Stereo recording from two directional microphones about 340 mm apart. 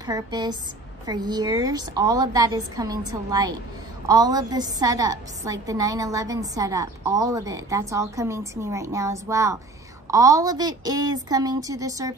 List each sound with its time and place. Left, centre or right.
0.0 s a woman's voice: centre